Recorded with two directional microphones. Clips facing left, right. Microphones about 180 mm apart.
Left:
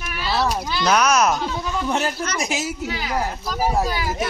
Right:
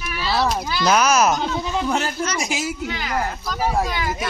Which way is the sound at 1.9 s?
Centre (ahead or behind).